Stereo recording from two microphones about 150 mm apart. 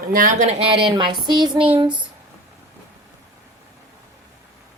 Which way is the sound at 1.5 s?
10° right (ahead or behind).